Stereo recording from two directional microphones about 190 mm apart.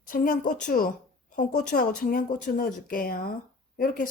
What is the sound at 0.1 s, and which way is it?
Speech, 45° left (ahead or behind).